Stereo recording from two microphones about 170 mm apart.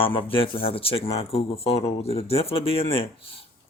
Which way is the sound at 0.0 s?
30° left (ahead or behind).